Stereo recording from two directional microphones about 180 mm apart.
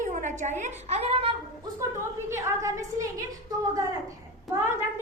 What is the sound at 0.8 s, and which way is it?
Speech, 35° right (ahead or behind).